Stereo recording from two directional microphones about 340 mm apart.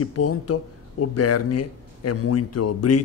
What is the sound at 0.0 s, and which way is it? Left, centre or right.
A man's voice, left.